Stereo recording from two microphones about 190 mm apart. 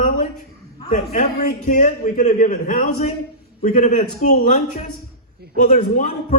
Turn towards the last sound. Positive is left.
turn(degrees=40)  # may be behind; listen again after turning